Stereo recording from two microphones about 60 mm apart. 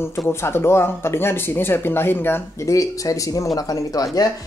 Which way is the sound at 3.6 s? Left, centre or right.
Left.